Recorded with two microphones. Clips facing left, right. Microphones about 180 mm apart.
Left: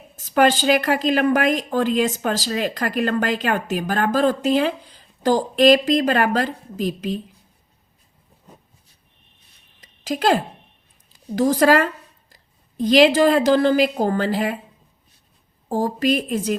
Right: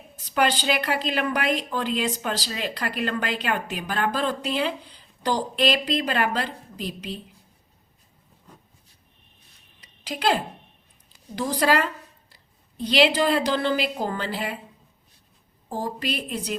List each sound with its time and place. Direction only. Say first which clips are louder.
0.2 s speech: left 6 dB; 45° left (ahead or behind)
9.8 s a sound: left 5 dB; 45° left (ahead or behind)
11.3 s a woman's voice: left 7 dB; 45° left (ahead or behind)
15.7 s speech: left 9 dB; 45° left (ahead or behind)